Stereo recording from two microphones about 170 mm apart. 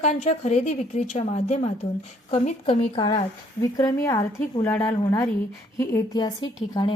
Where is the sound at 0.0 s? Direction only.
40° left (ahead or behind).